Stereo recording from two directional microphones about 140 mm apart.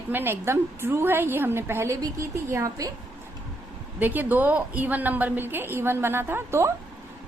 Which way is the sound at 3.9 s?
10° right (ahead or behind).